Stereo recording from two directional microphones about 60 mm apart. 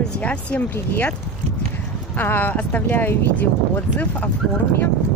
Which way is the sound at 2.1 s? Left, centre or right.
Left.